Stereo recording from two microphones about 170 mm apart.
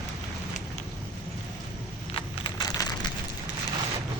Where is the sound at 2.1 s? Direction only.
25° left (ahead or behind).